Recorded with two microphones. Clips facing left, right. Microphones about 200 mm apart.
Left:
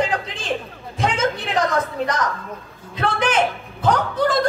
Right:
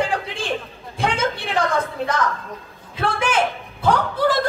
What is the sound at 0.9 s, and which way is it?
Speech, 30° right (ahead or behind).